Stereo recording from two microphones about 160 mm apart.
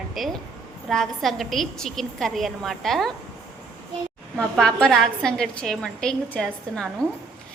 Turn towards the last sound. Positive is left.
turn(degrees=5)  # may be behind; listen again after turning